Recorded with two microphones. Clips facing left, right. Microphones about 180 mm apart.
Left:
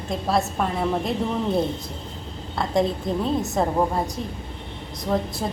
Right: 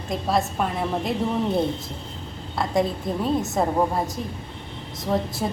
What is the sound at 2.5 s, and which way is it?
A woman's voice, centre (ahead or behind).